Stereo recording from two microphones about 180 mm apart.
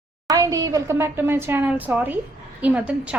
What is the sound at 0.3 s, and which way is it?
A woman's voice, 20° right (ahead or behind).